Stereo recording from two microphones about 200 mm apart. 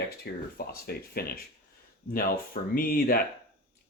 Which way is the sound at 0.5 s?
50° left (ahead or behind).